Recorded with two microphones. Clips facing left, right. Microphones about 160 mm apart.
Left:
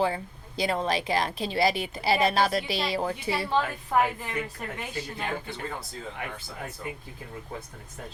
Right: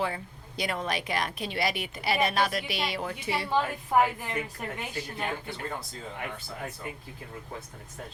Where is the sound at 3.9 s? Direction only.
10° right (ahead or behind).